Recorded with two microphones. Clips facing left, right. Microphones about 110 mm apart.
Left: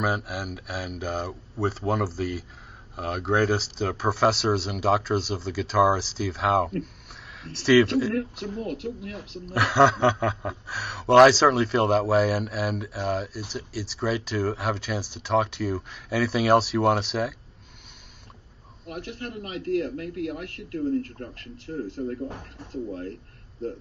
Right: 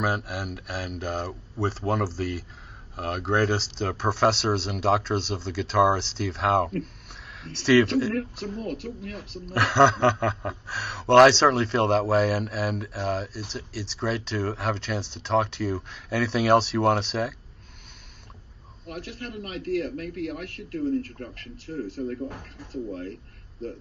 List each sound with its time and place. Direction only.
0.0 s a man's voice: centre (ahead or behind)
8.1 s a man's voice: 25° left (ahead or behind)
9.5 s a man's voice: centre (ahead or behind)
18.9 s a man's voice: 25° left (ahead or behind)